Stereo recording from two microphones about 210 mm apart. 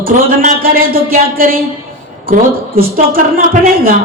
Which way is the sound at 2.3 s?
45° right (ahead or behind).